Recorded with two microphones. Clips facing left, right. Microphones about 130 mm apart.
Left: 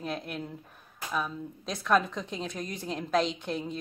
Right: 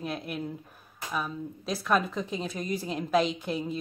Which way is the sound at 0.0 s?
5° right (ahead or behind).